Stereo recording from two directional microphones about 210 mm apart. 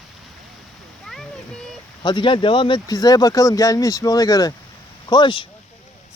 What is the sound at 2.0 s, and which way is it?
Speech, 20° left (ahead or behind).